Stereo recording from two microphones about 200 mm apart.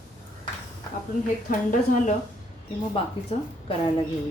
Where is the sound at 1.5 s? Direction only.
40° left (ahead or behind).